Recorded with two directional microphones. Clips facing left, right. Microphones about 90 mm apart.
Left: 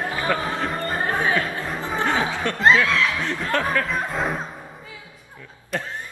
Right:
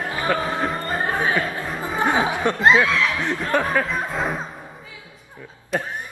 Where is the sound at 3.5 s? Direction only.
15° right (ahead or behind).